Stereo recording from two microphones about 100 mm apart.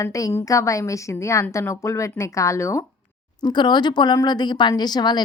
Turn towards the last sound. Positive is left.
turn(degrees=45)  # may be behind; listen again after turning